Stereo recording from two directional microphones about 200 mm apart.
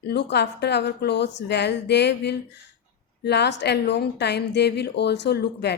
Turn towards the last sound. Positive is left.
turn(degrees=55)  # may be behind; listen again after turning